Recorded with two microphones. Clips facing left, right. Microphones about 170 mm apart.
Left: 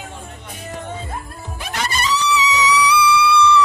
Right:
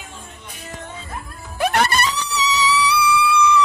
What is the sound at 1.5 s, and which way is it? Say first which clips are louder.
Music: right 7 dB; 60° right (ahead or behind).